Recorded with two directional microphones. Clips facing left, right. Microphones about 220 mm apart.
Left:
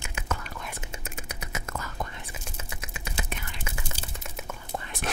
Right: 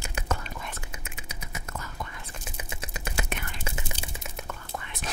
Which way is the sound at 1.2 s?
80° left.